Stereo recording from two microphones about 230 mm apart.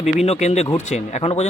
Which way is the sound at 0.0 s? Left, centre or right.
Left.